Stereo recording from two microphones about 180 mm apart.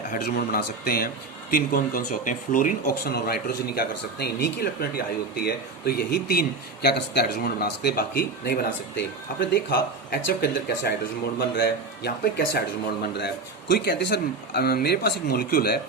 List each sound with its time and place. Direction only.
0.1 s speech: 55° left (ahead or behind)